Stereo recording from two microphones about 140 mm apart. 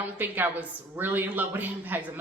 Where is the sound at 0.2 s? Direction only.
15° right (ahead or behind).